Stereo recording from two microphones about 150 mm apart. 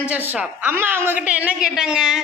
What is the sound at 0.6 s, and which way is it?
A woman's voice, 15° right (ahead or behind).